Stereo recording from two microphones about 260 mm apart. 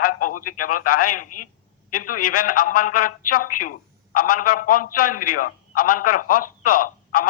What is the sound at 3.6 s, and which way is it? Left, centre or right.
A man's voice, left.